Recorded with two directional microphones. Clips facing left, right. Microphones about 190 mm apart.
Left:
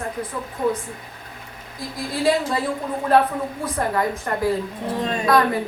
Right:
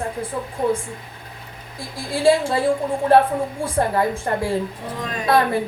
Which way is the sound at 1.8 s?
30° right (ahead or behind).